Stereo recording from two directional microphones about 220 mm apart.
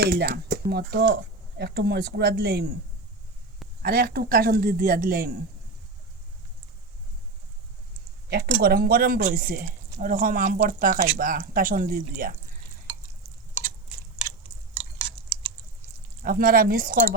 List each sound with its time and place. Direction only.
0.0 s speech: 45° right (ahead or behind)
3.8 s speech: 45° right (ahead or behind)
8.3 s speech: 45° right (ahead or behind)
14.3 s chewing: 15° right (ahead or behind)
16.2 s speech: 40° right (ahead or behind)